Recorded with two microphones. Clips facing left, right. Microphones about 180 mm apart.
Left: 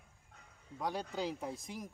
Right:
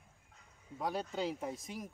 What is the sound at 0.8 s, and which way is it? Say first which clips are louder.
Speech: right 1 dB; centre (ahead or behind).